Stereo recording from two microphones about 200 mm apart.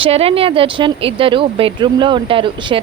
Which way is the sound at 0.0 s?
30° right (ahead or behind).